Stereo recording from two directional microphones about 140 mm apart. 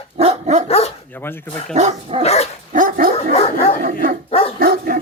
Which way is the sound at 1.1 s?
15° left (ahead or behind).